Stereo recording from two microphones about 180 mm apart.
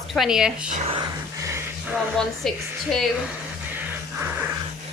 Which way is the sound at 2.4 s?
Centre (ahead or behind).